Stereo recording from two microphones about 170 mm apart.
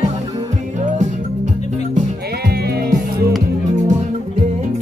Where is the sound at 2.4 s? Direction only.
70° right (ahead or behind).